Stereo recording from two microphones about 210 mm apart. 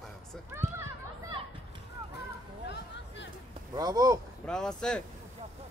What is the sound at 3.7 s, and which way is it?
Speech, 20° right (ahead or behind).